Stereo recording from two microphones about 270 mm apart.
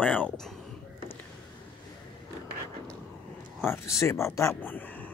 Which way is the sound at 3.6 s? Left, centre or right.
Centre.